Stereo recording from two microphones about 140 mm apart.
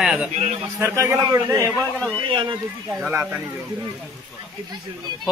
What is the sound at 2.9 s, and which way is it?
Speech, 5° right (ahead or behind).